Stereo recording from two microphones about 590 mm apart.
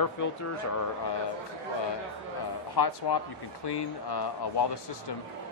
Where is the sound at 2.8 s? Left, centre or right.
Left.